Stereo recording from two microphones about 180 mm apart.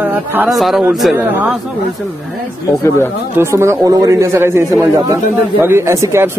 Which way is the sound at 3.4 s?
15° right (ahead or behind).